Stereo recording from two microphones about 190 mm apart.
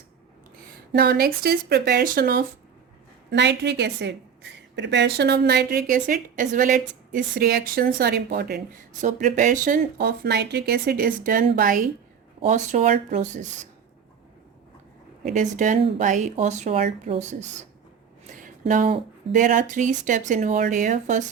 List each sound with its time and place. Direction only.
0.9 s a woman's voice: 55° right (ahead or behind)
3.2 s a woman's voice: 65° right (ahead or behind)
9.0 s speech: 40° right (ahead or behind)
15.4 s speech: 40° right (ahead or behind)